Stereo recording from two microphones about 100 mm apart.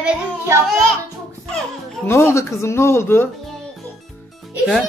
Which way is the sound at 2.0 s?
25° left (ahead or behind).